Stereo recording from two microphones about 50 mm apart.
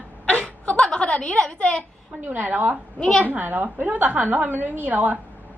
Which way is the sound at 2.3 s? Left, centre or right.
Right.